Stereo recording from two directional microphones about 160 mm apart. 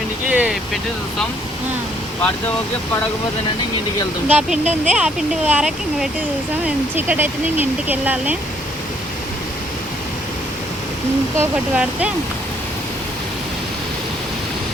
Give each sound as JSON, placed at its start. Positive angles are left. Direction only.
{"t": 0.3, "sound": "speech", "side_deg": -5}
{"t": 4.3, "sound": "speech", "side_deg": -5}
{"t": 11.3, "sound": "speech", "side_deg": -10}